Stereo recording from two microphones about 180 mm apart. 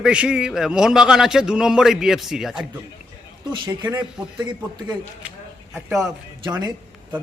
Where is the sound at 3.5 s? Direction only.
20° right (ahead or behind).